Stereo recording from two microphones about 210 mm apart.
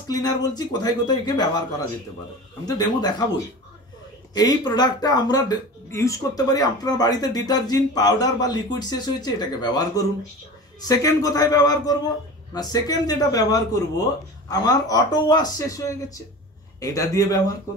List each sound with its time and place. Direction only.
0.1 s speech: 20° left (ahead or behind)
2.6 s speech: 20° left (ahead or behind)
4.3 s a man's voice: 20° left (ahead or behind)